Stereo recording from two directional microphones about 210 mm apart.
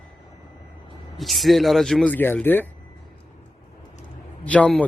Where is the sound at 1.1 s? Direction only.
Centre (ahead or behind).